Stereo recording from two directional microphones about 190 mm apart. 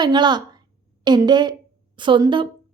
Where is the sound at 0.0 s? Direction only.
25° right (ahead or behind).